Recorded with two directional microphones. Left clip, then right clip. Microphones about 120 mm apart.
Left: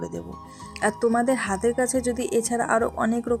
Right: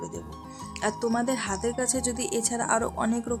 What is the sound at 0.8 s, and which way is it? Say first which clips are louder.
Speech: left 5 dB; 35° left (ahead or behind).